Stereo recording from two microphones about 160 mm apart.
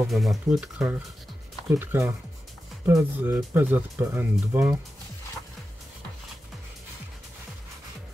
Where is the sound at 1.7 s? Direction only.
15° right (ahead or behind).